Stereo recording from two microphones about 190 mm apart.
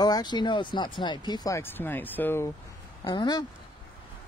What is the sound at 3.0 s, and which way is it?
Speech, 20° left (ahead or behind).